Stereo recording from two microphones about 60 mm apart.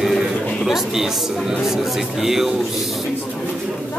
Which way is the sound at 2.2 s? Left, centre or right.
Centre.